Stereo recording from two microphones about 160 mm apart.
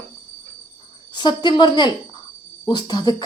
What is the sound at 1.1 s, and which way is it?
Speech, 30° left (ahead or behind).